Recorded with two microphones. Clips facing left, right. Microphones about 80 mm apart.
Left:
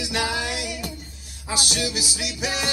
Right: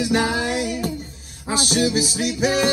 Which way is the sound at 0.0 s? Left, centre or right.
Right.